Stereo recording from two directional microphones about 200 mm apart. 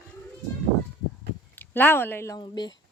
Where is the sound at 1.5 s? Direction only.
10° left (ahead or behind).